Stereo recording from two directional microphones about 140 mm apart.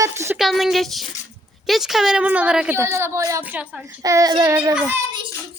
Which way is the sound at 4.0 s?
25° right (ahead or behind).